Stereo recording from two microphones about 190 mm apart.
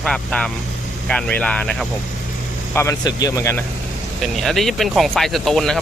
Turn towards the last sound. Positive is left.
turn(degrees=0)  # may be behind; listen again after turning